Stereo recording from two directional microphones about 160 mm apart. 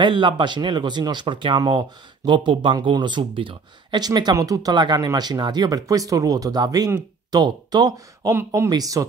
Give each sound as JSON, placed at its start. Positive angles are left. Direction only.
{"t": 0.0, "sound": "speech", "side_deg": -30}